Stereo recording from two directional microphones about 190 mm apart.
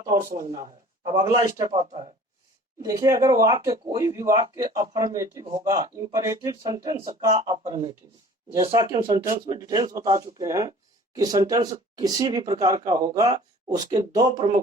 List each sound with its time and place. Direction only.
1.0 s speech: 20° right (ahead or behind)